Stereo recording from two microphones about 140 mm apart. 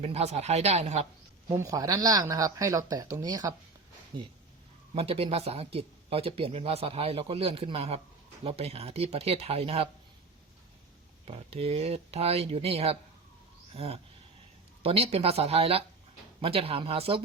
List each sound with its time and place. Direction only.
0.0 s speech: 50° right (ahead or behind)
1.5 s speech: 25° right (ahead or behind); by 9.9 s 45° right (ahead or behind)
11.3 s speech: 45° right (ahead or behind)